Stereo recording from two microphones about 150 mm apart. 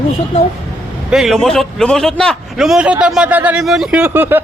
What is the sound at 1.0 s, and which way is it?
A man's voice, centre (ahead or behind).